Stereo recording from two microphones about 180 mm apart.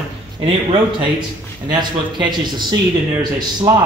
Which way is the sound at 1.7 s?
25° right (ahead or behind).